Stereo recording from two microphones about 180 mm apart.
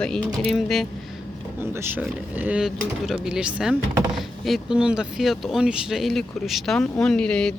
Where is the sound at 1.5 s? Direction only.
15° right (ahead or behind).